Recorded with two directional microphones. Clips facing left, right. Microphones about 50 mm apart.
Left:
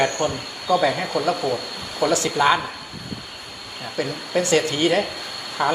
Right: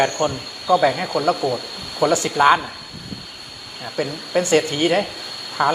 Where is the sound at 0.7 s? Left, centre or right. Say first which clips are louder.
Right 2 dB; centre.